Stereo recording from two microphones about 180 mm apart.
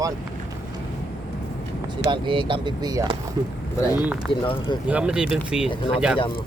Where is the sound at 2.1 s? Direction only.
25° right (ahead or behind).